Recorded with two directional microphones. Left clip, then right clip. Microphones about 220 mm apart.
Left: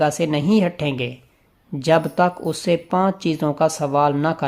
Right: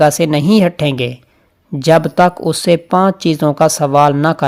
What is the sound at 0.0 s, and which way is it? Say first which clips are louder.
Speech: right 8 dB; 30° right (ahead or behind).